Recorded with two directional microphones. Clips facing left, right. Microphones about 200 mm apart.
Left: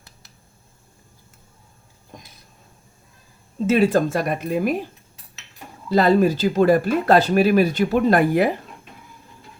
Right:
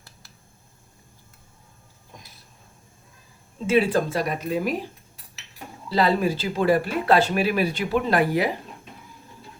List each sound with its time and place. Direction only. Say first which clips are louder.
3.7 s speech: left 3 dB; 45° left (ahead or behind)
5.9 s speech: left 5 dB; 45° left (ahead or behind)